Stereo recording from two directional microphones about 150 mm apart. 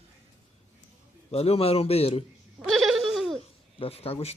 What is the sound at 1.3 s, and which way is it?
Speech, 40° left (ahead or behind).